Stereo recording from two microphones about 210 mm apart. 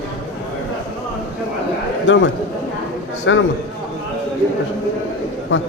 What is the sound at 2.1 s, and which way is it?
Speech, 60° left (ahead or behind).